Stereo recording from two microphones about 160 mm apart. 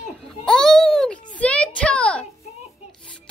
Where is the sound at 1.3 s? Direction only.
10° left (ahead or behind).